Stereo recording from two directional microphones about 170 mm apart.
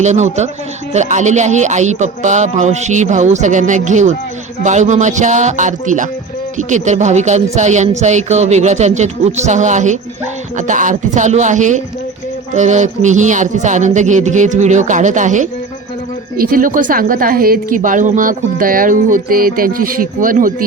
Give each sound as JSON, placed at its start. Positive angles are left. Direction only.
{"t": 0.0, "sound": "a woman's voice", "side_deg": -45}